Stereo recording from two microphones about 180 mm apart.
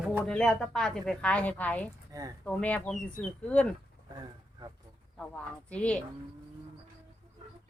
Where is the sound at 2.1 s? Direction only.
15° right (ahead or behind).